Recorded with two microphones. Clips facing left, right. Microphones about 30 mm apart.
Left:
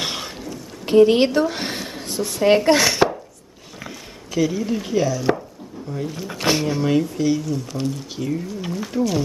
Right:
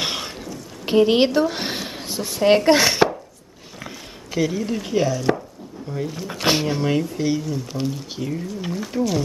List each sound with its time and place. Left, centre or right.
0.0 s a sound: centre
0.8 s a woman's voice: centre
4.3 s speech: centre
4.9 s speech: centre
5.9 s speech: centre
6.4 s speech: centre
6.9 s speech: centre